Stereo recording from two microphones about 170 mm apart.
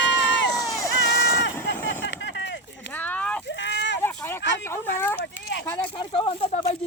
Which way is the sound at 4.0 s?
15° left (ahead or behind).